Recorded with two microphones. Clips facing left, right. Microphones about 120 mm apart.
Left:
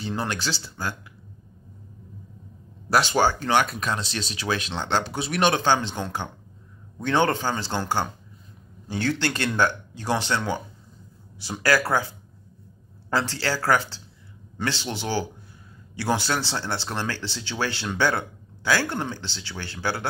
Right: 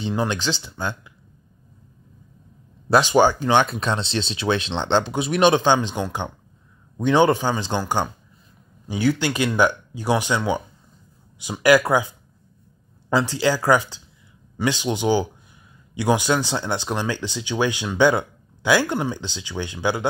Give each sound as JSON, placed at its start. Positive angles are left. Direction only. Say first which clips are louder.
{"t": 0.0, "sound": "speech", "louder": "right 5 dB", "side_deg": -20}
{"t": 2.9, "sound": "speech", "louder": "right 5 dB", "side_deg": -20}
{"t": 8.8, "sound": "speech", "louder": "right 4 dB", "side_deg": -10}
{"t": 13.1, "sound": "speech", "louder": "right 5 dB", "side_deg": -15}